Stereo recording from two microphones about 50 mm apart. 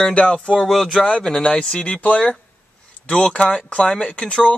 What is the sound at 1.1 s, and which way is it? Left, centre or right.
Speech, centre.